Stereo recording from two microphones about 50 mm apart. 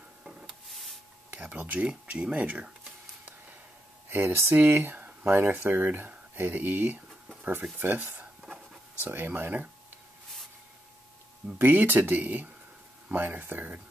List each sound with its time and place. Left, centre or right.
1.8 s speech: right
4.1 s speech: right
5.5 s speech: right
11.5 s speech: right